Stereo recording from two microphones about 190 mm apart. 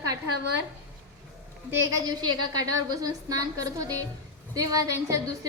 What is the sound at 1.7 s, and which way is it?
A woman's voice, 20° right (ahead or behind).